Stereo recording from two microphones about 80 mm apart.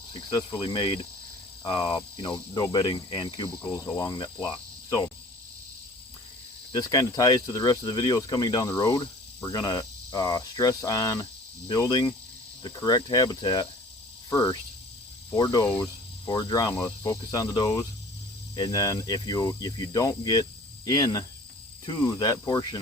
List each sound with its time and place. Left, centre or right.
0.1 s speech: left
3.9 s speech: left
4.2 s speech: left
4.9 s speech: left
6.7 s speech: left
16.8 s speech: left